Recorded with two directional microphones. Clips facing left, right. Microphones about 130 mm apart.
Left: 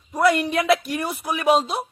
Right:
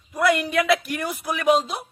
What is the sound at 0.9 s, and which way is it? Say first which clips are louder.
Speech: left 1 dB; 25° left (ahead or behind).